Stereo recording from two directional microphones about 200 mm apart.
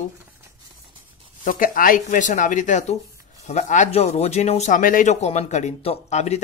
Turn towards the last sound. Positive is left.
turn(degrees=35)  # may be behind; listen again after turning